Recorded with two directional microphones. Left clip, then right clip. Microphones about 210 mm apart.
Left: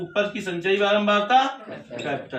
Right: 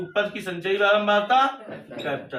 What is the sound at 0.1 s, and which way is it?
A man's voice, 15° left (ahead or behind).